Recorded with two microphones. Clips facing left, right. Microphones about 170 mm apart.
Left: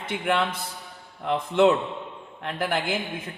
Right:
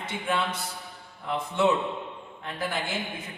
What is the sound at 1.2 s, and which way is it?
Speech, 80° left.